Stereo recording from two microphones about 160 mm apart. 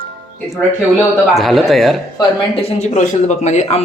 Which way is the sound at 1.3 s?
Centre (ahead or behind).